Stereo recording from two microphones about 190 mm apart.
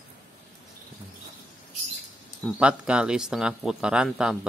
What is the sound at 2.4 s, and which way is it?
Speech, 5° right (ahead or behind).